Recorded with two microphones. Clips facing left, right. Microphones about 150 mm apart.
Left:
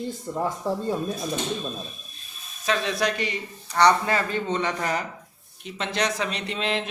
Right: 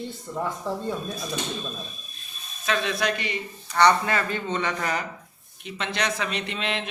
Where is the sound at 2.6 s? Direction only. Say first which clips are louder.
Left 1 dB; 35° left (ahead or behind).